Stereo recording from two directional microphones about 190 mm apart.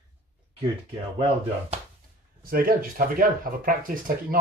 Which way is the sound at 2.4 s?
50° right (ahead or behind).